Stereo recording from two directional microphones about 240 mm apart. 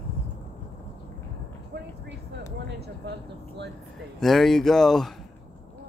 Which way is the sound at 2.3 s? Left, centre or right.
Right.